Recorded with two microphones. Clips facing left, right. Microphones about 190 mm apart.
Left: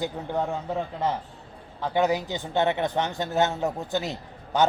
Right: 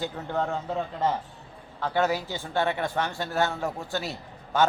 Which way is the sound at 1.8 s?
15° left (ahead or behind).